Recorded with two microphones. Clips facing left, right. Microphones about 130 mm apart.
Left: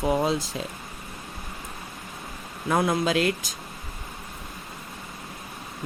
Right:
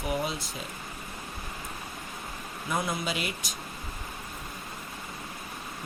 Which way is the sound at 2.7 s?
90° left.